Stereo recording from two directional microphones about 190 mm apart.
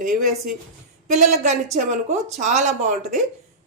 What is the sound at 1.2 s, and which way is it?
Speech, 40° right (ahead or behind).